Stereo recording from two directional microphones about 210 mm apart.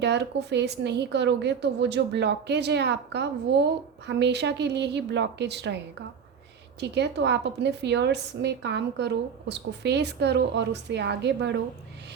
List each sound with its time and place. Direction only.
0.0 s a woman's voice: 55° right (ahead or behind)
6.7 s a woman's voice: 55° right (ahead or behind)